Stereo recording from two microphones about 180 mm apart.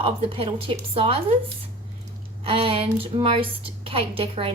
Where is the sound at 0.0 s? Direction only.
30° right (ahead or behind).